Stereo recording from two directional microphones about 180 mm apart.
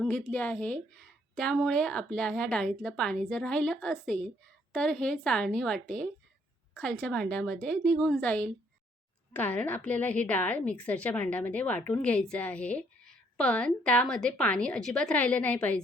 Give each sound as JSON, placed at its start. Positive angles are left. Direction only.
{"t": 0.0, "sound": "a woman's voice", "side_deg": 5}